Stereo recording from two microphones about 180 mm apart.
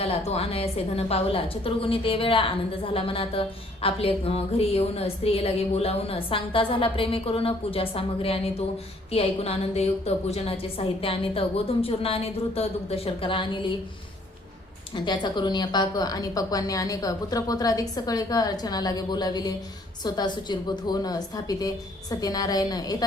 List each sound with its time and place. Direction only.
0.3 s a woman's voice: 35° left (ahead or behind)
14.9 s a woman's voice: 25° left (ahead or behind)